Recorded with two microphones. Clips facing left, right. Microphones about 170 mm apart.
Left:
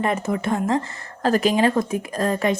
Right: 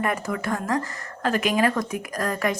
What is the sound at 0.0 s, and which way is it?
A woman's voice, 25° left (ahead or behind).